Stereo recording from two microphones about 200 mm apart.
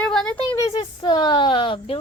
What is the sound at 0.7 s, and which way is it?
A woman's voice, 25° left (ahead or behind).